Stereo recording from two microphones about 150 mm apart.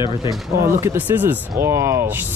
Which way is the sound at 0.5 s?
20° right (ahead or behind).